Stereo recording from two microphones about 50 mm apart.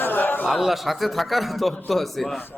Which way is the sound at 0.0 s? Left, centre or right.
Left.